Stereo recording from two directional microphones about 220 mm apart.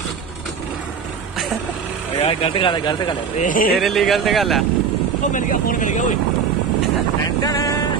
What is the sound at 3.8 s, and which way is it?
Speech, centre (ahead or behind).